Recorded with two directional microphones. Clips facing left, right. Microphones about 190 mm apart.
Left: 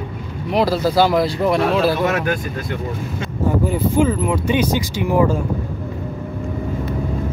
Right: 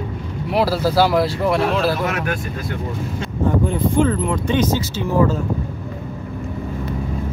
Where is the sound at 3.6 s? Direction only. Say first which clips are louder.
Left 2 dB; 5° left (ahead or behind).